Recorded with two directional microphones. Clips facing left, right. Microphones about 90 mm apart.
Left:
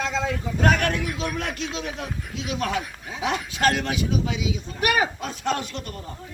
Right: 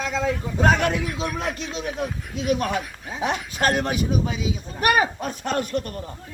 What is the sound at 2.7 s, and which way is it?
A man's voice, 40° right (ahead or behind).